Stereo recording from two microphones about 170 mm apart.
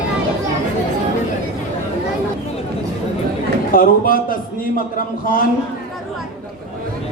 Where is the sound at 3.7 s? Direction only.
55° left (ahead or behind).